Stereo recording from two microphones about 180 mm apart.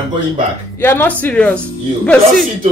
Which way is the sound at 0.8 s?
10° left (ahead or behind).